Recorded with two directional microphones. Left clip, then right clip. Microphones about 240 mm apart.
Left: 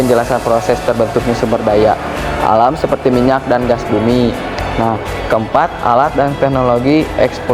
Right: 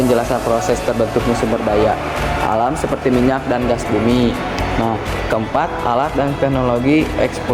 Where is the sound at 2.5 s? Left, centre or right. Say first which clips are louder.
Left 9 dB; centre.